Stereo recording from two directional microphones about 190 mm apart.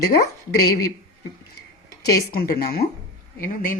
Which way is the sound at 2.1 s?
50° left (ahead or behind).